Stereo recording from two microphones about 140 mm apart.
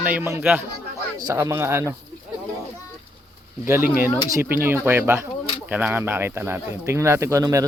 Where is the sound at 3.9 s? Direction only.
20° right (ahead or behind).